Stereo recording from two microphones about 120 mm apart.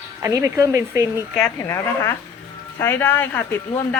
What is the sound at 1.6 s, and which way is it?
A woman's voice, 25° left (ahead or behind).